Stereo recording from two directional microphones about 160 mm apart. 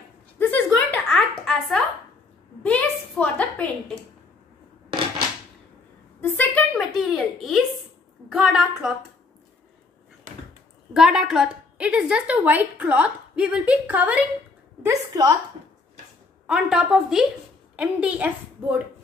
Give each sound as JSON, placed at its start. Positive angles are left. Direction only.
{"t": 0.4, "sound": "a sound", "side_deg": 10}
{"t": 6.2, "sound": "a sound", "side_deg": 15}
{"t": 6.7, "sound": "a child's voice", "side_deg": 0}
{"t": 10.9, "sound": "a woman's voice", "side_deg": -5}
{"t": 14.8, "sound": "a woman's voice", "side_deg": -20}
{"t": 16.4, "sound": "a woman's voice", "side_deg": -5}